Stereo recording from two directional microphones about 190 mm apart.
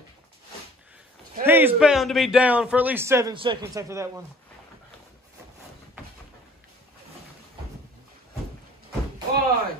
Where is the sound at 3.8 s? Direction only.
15° right (ahead or behind).